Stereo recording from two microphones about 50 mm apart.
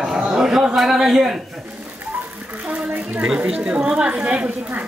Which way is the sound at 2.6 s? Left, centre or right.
Right.